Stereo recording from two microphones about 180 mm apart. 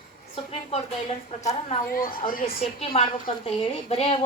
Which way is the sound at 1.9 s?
50° left (ahead or behind).